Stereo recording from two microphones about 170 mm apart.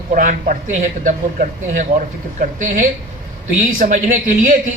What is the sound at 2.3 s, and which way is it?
Speech, 50° right (ahead or behind).